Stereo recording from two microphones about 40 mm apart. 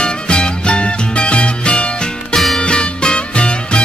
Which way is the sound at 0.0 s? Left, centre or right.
Left.